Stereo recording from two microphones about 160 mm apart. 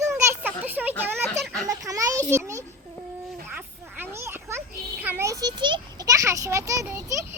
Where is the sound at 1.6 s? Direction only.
20° right (ahead or behind).